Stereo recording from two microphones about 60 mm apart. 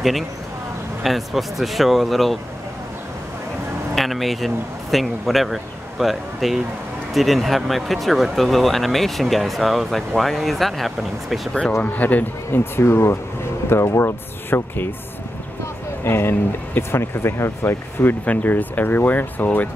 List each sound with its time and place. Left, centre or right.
1.0 s speech: centre
3.9 s speech: centre
11.8 s speech: left
12.7 s speech: left
16.0 s speech: left
18.2 s speech: left